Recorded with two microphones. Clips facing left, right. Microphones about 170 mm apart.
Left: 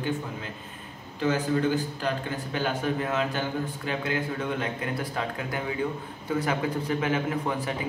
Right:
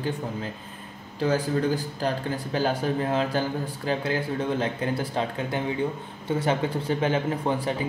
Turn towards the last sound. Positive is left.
turn(degrees=-30)  # may be behind; listen again after turning